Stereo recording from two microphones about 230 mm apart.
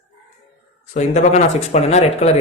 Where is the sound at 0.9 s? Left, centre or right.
Left.